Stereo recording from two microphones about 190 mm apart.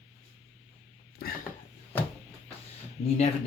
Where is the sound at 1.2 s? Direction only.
55° left (ahead or behind).